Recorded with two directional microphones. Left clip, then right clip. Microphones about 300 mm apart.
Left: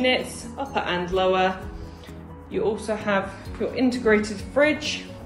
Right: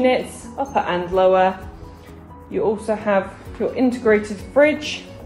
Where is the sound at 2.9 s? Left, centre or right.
Centre.